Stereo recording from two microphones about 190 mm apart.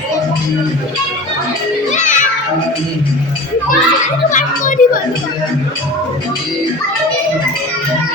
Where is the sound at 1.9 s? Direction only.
40° left (ahead or behind).